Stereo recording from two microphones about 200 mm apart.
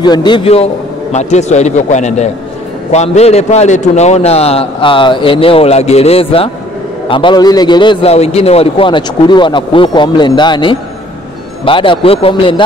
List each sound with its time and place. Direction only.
0.0 s a man's voice: 20° left (ahead or behind)